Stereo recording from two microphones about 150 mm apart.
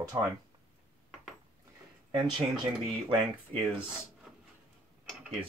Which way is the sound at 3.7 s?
5° right (ahead or behind).